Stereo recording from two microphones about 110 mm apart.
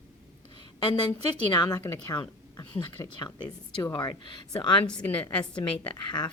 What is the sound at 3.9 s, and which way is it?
Speech, 45° left (ahead or behind).